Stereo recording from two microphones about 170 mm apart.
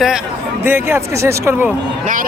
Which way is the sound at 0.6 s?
15° right (ahead or behind).